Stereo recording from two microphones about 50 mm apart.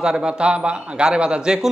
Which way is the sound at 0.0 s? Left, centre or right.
Centre.